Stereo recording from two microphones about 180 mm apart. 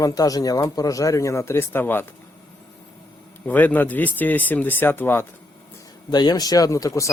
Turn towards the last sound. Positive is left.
turn(degrees=20)  # may be behind; listen again after turning